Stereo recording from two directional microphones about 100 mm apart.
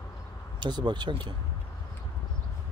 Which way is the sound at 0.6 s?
50° right (ahead or behind).